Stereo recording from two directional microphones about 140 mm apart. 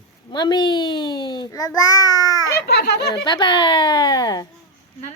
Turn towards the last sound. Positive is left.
turn(degrees=30)  # may be behind; listen again after turning